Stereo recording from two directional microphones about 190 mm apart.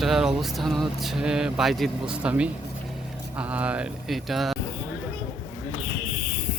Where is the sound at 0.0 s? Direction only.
Centre (ahead or behind).